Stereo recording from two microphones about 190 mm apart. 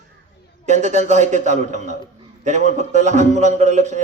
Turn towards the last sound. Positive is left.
turn(degrees=-40)  # may be behind; listen again after turning